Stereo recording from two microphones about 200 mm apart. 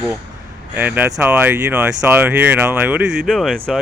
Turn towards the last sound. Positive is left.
turn(degrees=0)  # may be behind; listen again after turning